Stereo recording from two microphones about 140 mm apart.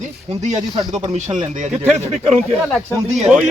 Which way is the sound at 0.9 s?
60° right (ahead or behind).